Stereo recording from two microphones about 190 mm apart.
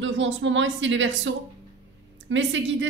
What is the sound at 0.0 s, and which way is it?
A woman's voice, 80° right.